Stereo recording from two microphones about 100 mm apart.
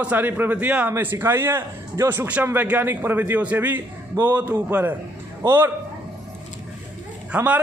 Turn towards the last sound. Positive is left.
turn(degrees=-15)  # may be behind; listen again after turning